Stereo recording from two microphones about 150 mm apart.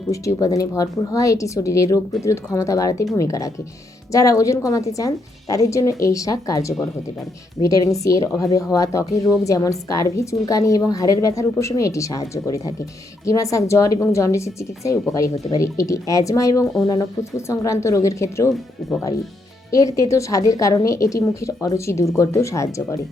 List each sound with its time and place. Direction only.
0.1 s speech: 20° left (ahead or behind)
18.8 s speech: centre (ahead or behind)
19.7 s speech: 20° left (ahead or behind)